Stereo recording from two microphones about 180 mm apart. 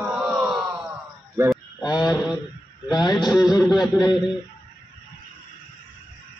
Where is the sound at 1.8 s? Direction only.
20° left (ahead or behind).